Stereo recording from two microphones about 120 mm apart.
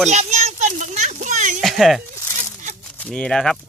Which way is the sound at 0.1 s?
75° right (ahead or behind).